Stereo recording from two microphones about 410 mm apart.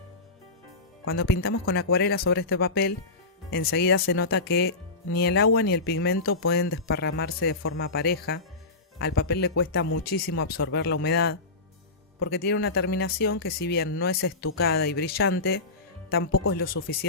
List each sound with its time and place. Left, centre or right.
1.0 s speech: left